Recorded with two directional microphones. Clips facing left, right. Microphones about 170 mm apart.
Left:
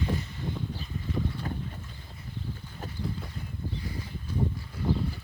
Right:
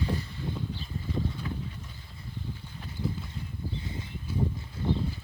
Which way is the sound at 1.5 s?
45° left (ahead or behind).